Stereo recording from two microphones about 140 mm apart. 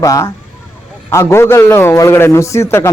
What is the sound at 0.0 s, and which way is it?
A man's voice, 25° left (ahead or behind).